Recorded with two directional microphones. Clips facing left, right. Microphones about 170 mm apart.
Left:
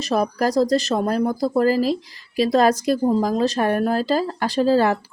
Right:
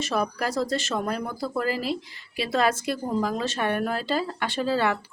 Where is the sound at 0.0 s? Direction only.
40° left (ahead or behind).